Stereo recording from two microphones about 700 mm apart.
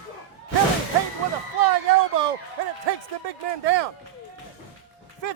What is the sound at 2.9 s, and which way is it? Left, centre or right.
A man's voice, right.